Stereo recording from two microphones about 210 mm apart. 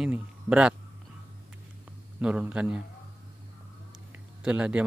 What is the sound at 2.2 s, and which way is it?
Speech, 5° right (ahead or behind).